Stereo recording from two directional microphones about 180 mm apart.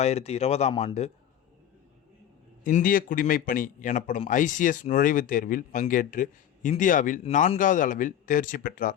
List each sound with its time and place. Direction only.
0.0 s speech: 35° left (ahead or behind)
2.6 s a man's voice: 50° left (ahead or behind)